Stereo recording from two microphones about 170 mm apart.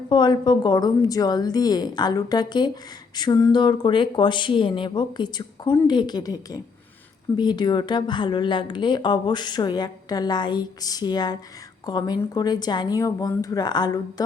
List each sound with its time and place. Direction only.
0.1 s a woman's voice: 25° left (ahead or behind)